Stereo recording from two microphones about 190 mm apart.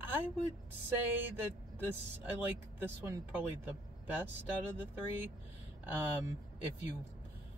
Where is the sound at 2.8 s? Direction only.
10° right (ahead or behind).